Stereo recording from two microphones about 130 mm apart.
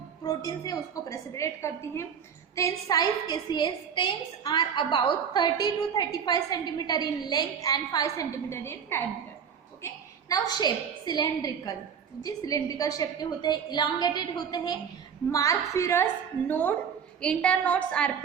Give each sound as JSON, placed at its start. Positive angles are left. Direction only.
{"t": 0.2, "sound": "a woman's voice", "side_deg": 30}
{"t": 9.8, "sound": "a woman's voice", "side_deg": 30}